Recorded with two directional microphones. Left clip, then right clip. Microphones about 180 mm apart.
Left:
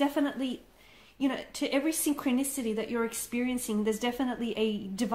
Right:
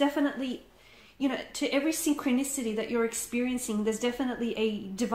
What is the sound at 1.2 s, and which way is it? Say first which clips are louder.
A woman's voice: right 1 dB; 40° left (ahead or behind).